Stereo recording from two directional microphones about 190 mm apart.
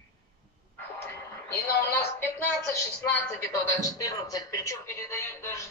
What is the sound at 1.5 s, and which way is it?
Speech, 10° left (ahead or behind).